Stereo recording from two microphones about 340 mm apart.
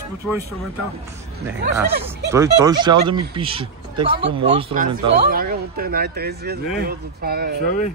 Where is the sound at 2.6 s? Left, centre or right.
Centre; by 7.6 s right.